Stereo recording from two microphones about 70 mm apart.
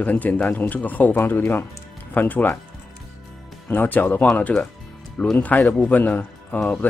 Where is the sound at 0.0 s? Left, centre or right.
Left.